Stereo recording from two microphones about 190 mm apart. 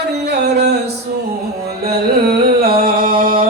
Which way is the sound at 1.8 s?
55° right (ahead or behind).